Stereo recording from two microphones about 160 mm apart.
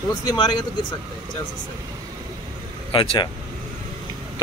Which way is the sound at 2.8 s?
30° left (ahead or behind).